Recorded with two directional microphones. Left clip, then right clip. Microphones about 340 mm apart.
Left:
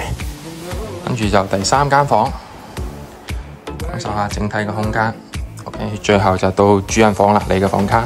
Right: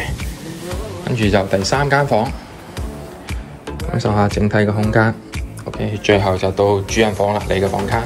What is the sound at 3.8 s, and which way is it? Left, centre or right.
Speech, centre.